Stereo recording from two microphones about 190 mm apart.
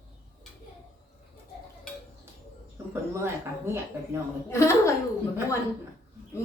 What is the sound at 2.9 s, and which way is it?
Speech, 15° right (ahead or behind).